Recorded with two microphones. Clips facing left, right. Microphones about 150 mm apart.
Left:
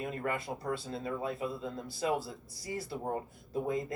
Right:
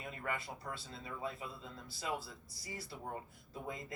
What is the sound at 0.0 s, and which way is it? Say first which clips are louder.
A man's voice: left 7 dB; 50° left (ahead or behind).